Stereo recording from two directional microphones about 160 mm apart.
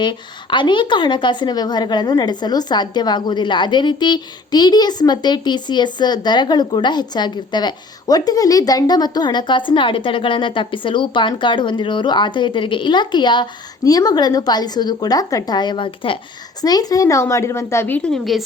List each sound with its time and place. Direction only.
0.0 s a woman's voice: 30° left (ahead or behind); by 18.4 s centre (ahead or behind)